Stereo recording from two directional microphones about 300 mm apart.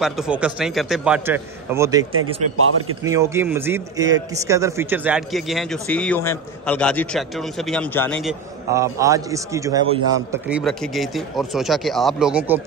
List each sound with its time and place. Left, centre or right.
0.0 s a man's voice: centre
2.5 s a man's voice: right
3.0 s a man's voice: centre